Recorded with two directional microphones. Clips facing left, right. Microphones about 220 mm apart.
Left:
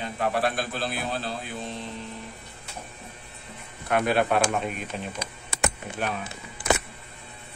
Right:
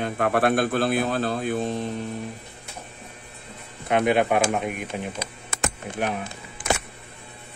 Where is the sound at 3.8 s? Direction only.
20° right (ahead or behind).